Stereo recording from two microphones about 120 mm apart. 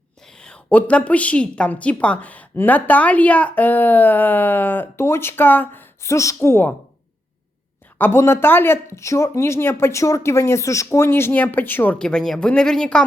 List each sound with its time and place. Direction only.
0.3 s a woman's voice: 5° left (ahead or behind)
7.9 s speech: 20° left (ahead or behind)